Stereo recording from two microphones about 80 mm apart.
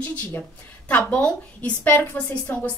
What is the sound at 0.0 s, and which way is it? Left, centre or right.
A woman's voice, left.